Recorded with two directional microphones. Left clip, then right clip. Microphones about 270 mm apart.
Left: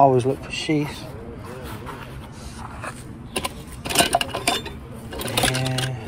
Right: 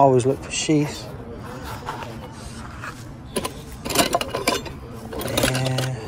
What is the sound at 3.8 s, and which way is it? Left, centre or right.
Sewing machine, right.